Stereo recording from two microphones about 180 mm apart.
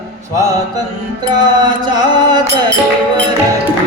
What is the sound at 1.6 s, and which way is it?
Music, 25° right (ahead or behind).